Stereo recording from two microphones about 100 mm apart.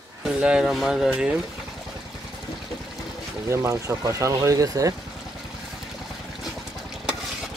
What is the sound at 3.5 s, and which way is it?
Speech, 30° right (ahead or behind).